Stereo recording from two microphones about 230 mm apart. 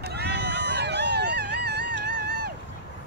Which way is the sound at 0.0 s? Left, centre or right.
Right.